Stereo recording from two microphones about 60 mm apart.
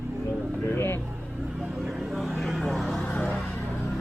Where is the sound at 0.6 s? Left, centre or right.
Left.